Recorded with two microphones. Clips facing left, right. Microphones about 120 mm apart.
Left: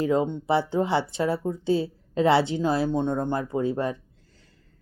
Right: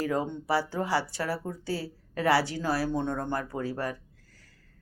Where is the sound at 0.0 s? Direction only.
20° left (ahead or behind).